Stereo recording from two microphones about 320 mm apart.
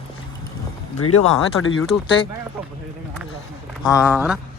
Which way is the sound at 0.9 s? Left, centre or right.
Left.